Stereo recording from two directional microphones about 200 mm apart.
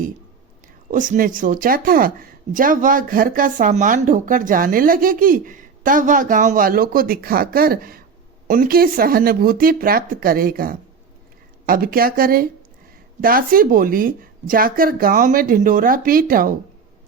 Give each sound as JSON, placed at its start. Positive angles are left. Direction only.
{"t": 0.9, "sound": "speech", "side_deg": -40}